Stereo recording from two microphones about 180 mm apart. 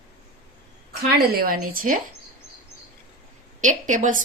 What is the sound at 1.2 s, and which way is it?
Speech, 55° right (ahead or behind).